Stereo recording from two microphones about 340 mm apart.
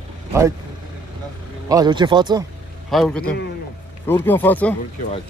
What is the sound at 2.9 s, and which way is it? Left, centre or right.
Speech, centre.